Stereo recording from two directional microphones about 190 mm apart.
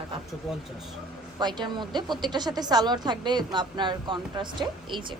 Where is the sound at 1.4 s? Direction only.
25° right (ahead or behind).